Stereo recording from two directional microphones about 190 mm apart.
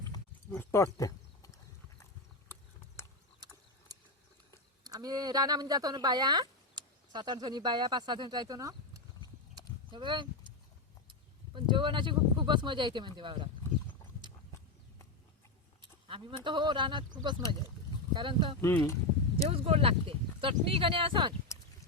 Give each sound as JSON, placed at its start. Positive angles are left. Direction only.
{"t": 0.5, "sound": "a sound", "side_deg": 10}
{"t": 4.8, "sound": "speech", "side_deg": -20}
{"t": 15.8, "sound": "speech", "side_deg": -25}
{"t": 18.1, "sound": "speech", "side_deg": -25}
{"t": 18.6, "sound": "speech", "side_deg": 15}
{"t": 19.5, "sound": "speech", "side_deg": -30}